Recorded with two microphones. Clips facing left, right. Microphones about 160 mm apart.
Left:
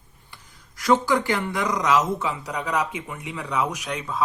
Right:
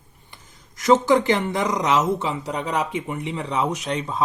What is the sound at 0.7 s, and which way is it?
Speech, 20° right (ahead or behind).